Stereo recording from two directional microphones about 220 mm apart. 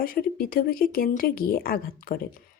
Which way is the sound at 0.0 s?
40° left (ahead or behind).